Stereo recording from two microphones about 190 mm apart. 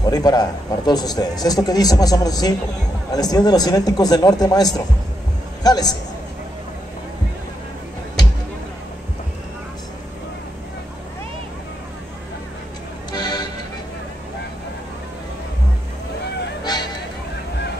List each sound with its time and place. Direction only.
0.0 s speech: 20° left (ahead or behind)
13.1 s music: 20° left (ahead or behind)
16.6 s a sound: 20° left (ahead or behind)